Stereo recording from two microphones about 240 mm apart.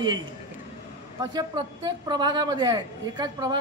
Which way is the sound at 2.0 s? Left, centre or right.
Centre.